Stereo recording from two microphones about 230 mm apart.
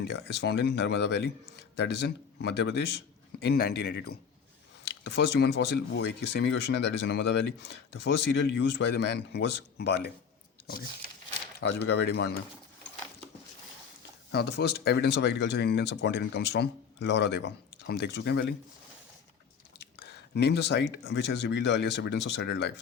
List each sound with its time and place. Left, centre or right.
0.0 s speech: left
11.6 s speech: left
14.3 s speech: left
20.1 s speech: left